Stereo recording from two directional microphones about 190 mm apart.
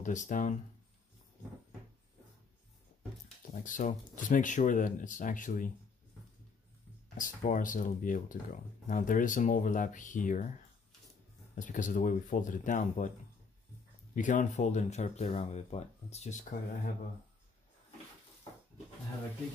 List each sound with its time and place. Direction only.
0.0 s speech: 40° left (ahead or behind)
3.6 s speech: 45° left (ahead or behind)
7.2 s speech: 45° left (ahead or behind)
11.5 s speech: 45° left (ahead or behind)
14.1 s speech: 40° left (ahead or behind)